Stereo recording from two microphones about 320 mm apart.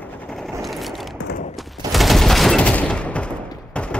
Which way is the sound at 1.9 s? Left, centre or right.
Centre.